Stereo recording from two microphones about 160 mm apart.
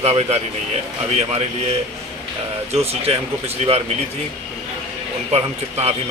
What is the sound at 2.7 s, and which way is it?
Speech, 40° right (ahead or behind).